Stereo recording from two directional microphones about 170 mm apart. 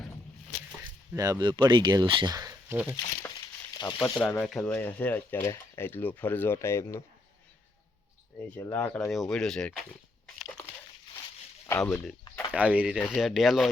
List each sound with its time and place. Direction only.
1.1 s speech: 20° right (ahead or behind)
2.9 s crumpling: 25° left (ahead or behind)
4.2 s speech: 15° left (ahead or behind)
8.5 s speech: 10° left (ahead or behind)
11.8 s speech: 15° left (ahead or behind)
12.5 s speech: 10° right (ahead or behind)